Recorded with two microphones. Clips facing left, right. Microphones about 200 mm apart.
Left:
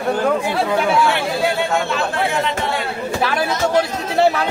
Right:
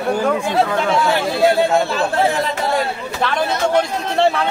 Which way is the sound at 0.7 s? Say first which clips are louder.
Left 1 dB; 10° left (ahead or behind).